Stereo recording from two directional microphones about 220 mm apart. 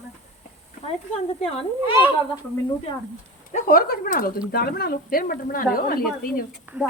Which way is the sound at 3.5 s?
40° left (ahead or behind).